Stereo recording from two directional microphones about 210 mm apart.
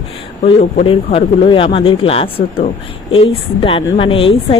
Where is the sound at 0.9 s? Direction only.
25° left (ahead or behind).